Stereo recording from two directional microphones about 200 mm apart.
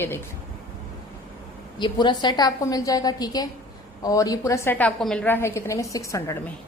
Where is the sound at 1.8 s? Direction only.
25° left (ahead or behind).